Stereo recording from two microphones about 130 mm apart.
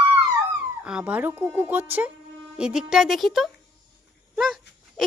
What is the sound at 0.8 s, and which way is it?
Speech, 10° right (ahead or behind).